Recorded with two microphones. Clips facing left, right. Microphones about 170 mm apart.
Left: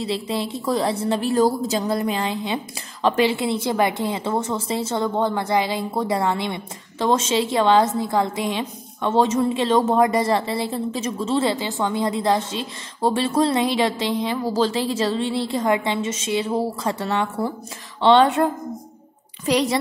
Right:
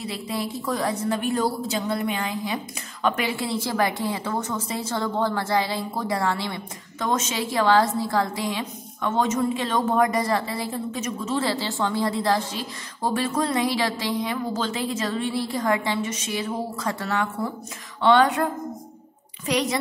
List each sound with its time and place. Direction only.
0.0 s a woman's voice: 25° left (ahead or behind)